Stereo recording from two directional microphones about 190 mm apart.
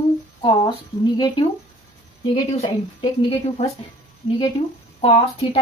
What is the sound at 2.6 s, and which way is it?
A woman's voice, 30° left (ahead or behind).